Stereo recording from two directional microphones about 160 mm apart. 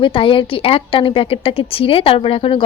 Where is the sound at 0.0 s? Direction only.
35° left (ahead or behind).